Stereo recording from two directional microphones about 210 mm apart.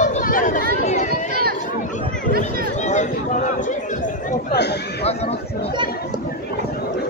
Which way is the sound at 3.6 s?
40° left (ahead or behind).